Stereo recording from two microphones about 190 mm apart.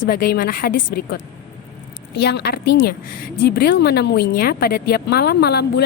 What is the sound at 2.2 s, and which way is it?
A woman's voice, 60° left (ahead or behind).